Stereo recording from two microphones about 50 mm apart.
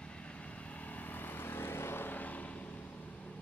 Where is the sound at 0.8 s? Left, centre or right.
Left.